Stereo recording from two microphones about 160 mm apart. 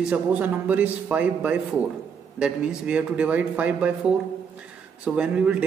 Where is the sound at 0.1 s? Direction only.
10° right (ahead or behind).